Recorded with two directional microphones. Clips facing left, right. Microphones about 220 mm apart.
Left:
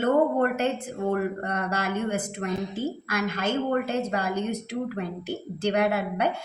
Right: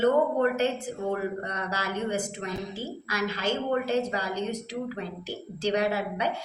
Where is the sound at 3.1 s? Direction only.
55° left (ahead or behind).